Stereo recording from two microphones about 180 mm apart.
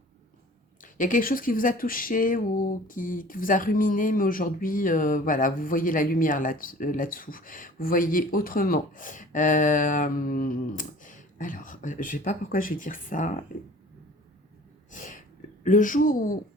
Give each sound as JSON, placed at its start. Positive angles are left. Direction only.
{"t": 0.8, "sound": "speech", "side_deg": 50}
{"t": 14.8, "sound": "sneeze", "side_deg": 45}
{"t": 15.6, "sound": "speech", "side_deg": 45}